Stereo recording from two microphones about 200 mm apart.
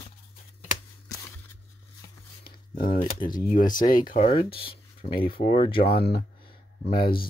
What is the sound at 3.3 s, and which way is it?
Speech, 40° left (ahead or behind).